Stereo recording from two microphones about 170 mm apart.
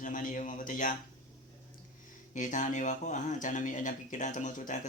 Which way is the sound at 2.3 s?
50° left (ahead or behind).